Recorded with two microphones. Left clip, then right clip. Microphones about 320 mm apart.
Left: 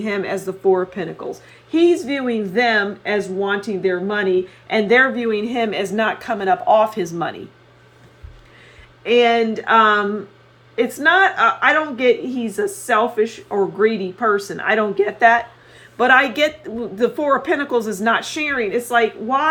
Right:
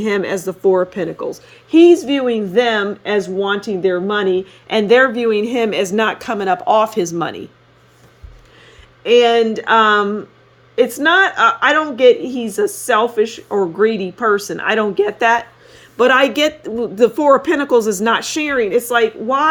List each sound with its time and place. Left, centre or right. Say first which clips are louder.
0.0 s a woman's voice: right 4 dB; right
9.0 s speech: right 3 dB; right